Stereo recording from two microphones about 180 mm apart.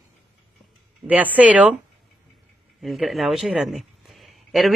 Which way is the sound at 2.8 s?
Centre (ahead or behind).